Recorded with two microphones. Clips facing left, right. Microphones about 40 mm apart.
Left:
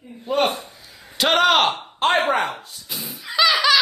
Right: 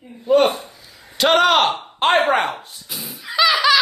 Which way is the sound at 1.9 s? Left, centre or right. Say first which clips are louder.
Right 3 dB; right.